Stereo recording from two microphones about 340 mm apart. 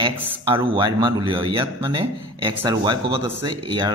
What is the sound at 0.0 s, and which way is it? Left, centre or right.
A man's voice, centre.